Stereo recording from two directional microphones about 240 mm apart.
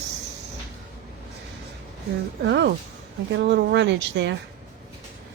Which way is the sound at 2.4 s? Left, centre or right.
Right.